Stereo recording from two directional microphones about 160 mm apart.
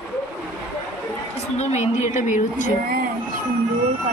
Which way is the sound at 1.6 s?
45° left (ahead or behind).